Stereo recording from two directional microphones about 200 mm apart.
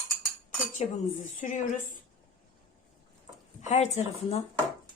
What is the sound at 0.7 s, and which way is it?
Speech, 35° left (ahead or behind).